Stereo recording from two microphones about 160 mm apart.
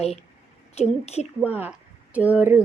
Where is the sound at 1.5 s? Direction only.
10° right (ahead or behind).